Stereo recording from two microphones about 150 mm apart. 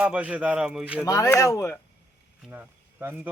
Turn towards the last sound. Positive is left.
turn(degrees=-15)  # may be behind; listen again after turning